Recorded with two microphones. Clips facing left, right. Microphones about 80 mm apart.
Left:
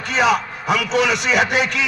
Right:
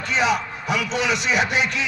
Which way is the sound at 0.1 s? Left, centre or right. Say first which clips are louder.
Left 4 dB; left.